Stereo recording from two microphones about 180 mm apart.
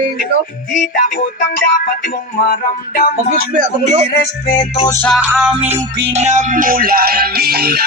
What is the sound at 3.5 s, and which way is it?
Speech, 45° right (ahead or behind).